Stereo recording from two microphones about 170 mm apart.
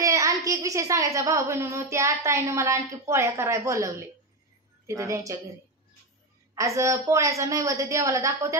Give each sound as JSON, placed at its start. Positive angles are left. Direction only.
{"t": 0.0, "sound": "a child's voice", "side_deg": -20}
{"t": 6.5, "sound": "a child's voice", "side_deg": -20}